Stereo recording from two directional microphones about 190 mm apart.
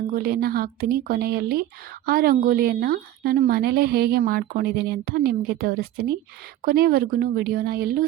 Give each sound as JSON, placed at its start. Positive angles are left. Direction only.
{"t": 0.1, "sound": "a woman's voice", "side_deg": -50}